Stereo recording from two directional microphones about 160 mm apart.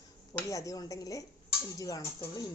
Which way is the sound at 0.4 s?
20° left (ahead or behind).